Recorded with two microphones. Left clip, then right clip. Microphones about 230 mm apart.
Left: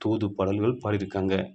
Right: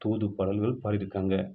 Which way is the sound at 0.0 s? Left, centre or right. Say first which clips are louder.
Left 3 dB; left.